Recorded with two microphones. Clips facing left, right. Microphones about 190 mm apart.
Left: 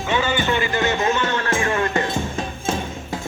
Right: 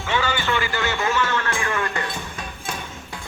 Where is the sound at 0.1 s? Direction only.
20° left (ahead or behind).